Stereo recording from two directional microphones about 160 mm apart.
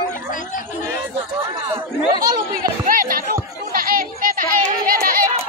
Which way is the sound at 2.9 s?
60° right (ahead or behind).